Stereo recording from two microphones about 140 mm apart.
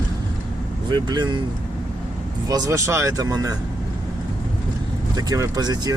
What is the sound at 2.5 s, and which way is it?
Speech, 25° right (ahead or behind).